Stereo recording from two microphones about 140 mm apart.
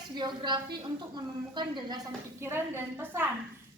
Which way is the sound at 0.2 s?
30° right (ahead or behind).